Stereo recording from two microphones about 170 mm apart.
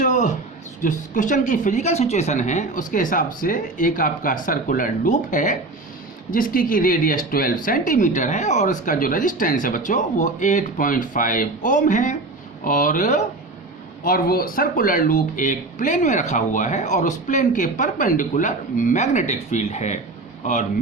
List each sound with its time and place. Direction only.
0.0 s a sound: 50° left (ahead or behind)
0.8 s speech: 50° left (ahead or behind)
14.0 s speech: 60° left (ahead or behind); by 20.0 s 40° left (ahead or behind)